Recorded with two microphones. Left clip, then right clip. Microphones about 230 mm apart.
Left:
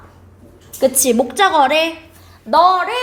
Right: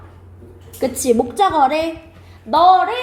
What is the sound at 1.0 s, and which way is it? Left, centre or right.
Speech, left.